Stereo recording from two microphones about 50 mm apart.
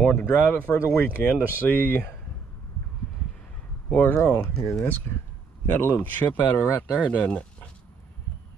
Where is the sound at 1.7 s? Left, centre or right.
Left.